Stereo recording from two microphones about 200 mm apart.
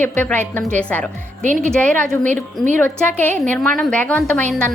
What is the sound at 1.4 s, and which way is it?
Speech, 40° right (ahead or behind).